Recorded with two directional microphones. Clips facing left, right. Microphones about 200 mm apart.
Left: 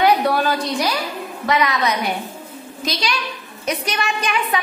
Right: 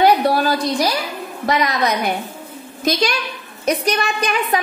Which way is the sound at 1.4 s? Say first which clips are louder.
Even; 40° right (ahead or behind).